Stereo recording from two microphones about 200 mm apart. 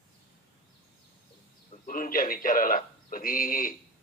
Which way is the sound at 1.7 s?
40° left (ahead or behind).